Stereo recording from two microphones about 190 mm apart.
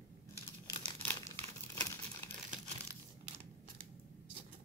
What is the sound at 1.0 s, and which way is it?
Crumpling, 10° left (ahead or behind).